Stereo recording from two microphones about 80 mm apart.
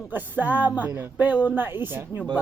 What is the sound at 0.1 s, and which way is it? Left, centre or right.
Speech, right.